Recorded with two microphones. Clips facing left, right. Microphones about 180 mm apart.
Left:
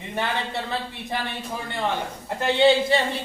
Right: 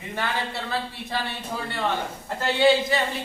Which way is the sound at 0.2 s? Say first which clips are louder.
Left 2 dB; 20° left (ahead or behind).